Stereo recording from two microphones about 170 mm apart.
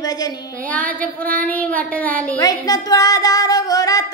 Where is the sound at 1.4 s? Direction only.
10° left (ahead or behind).